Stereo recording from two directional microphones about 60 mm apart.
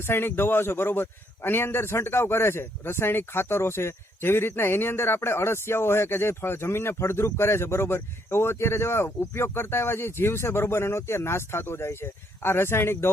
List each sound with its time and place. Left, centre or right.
0.0 s a man's voice: left